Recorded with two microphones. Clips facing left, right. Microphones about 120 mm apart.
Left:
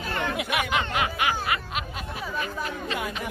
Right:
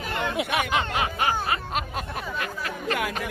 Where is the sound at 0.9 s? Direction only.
35° right (ahead or behind).